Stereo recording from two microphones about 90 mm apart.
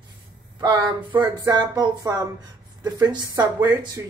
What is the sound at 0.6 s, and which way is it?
A woman's voice, 55° right (ahead or behind).